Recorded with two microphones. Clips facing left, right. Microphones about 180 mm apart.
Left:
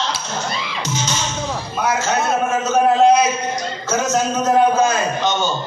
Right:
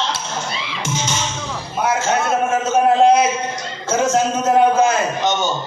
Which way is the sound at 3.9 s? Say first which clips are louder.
Right 2 dB; 30° right (ahead or behind).